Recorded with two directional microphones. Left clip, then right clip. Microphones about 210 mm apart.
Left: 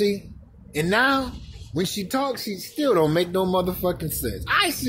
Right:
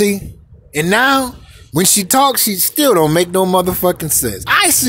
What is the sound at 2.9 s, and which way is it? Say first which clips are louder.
Speech: right 8 dB; 30° right (ahead or behind).